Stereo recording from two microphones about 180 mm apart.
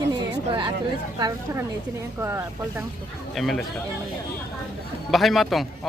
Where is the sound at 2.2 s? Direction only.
15° right (ahead or behind).